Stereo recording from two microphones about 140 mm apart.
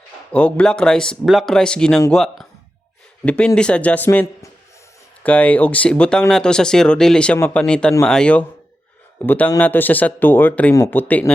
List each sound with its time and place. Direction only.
0.3 s speech: 10° left (ahead or behind)
7.3 s speech: 15° left (ahead or behind)
7.6 s speech: 5° left (ahead or behind)